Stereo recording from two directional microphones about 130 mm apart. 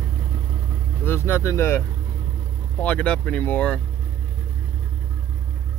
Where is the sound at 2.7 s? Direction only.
10° left (ahead or behind).